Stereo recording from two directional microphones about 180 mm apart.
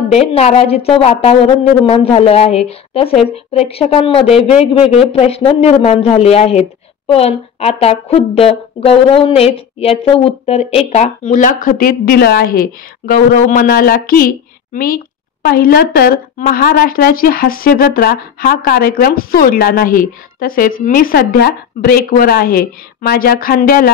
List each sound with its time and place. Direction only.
0.3 s a woman's voice: 35° left (ahead or behind); by 23.9 s 50° left (ahead or behind)